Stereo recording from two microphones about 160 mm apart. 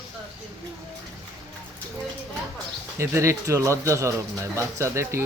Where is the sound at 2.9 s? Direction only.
15° right (ahead or behind).